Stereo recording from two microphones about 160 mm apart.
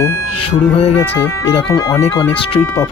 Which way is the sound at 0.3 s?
35° left (ahead or behind).